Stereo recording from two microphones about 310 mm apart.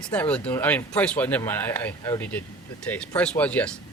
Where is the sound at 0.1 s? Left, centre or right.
Centre.